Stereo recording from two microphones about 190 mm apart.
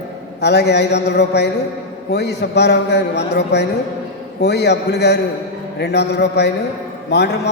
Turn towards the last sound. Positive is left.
turn(degrees=65)  # may be behind; listen again after turning